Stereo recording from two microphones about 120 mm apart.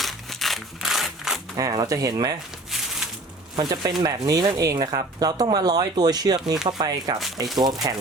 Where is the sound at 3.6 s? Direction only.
35° right (ahead or behind).